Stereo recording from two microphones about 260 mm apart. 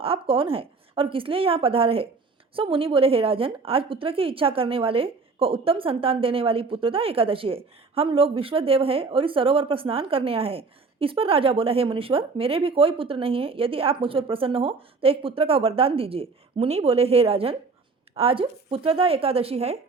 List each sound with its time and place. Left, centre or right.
0.0 s a woman's voice: right